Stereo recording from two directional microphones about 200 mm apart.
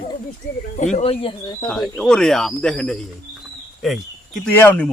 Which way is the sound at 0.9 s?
30° left (ahead or behind).